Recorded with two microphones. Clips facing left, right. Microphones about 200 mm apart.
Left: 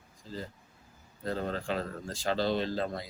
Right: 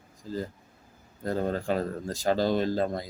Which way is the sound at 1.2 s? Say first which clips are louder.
Right 5 dB; 45° right (ahead or behind).